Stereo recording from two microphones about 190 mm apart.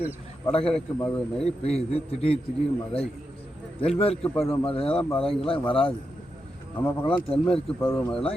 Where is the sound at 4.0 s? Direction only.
30° left (ahead or behind).